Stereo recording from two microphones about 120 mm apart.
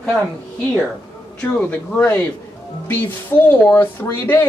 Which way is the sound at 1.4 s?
10° left (ahead or behind).